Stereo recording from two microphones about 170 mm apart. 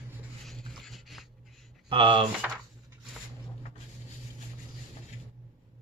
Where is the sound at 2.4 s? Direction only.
5° right (ahead or behind).